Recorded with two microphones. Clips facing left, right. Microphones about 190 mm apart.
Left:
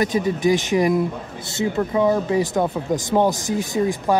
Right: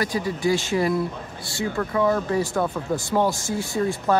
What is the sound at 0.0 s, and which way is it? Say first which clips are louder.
Speech: left 5 dB; 20° left (ahead or behind).